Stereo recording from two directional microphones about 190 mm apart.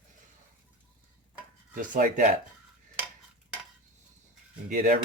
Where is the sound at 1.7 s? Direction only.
45° right (ahead or behind).